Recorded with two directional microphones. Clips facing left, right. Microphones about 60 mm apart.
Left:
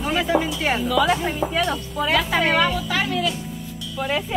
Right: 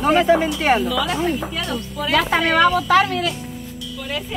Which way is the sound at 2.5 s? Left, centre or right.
Right.